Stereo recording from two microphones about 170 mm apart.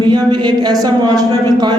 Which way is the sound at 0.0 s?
25° right (ahead or behind).